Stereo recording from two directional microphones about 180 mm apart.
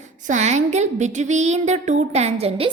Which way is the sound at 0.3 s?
40° right (ahead or behind).